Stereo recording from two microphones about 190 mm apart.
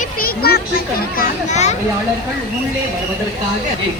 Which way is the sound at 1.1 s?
45° left (ahead or behind).